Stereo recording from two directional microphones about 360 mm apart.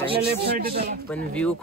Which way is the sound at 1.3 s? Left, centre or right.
Centre.